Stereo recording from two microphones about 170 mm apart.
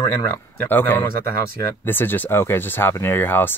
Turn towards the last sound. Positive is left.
turn(degrees=10)  # may be behind; listen again after turning